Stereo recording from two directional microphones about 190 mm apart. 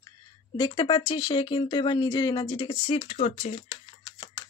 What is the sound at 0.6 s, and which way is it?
Speech, 25° left (ahead or behind).